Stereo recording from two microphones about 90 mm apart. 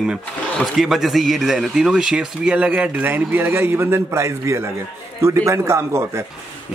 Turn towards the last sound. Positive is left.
turn(degrees=-30)  # may be behind; listen again after turning